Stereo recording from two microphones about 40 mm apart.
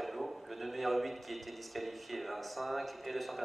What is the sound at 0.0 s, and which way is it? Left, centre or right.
Speech, centre.